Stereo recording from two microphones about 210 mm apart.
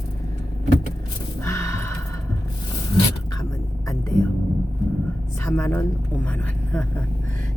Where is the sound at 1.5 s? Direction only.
15° left (ahead or behind).